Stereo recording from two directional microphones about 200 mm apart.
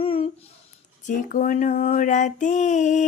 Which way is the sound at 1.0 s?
40° left (ahead or behind).